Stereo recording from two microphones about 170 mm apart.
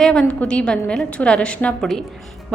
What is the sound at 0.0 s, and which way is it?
A woman's voice, 5° left (ahead or behind).